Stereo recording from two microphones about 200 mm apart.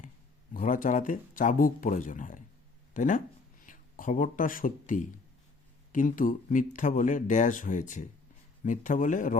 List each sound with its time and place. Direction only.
0.5 s speech: 40° left (ahead or behind)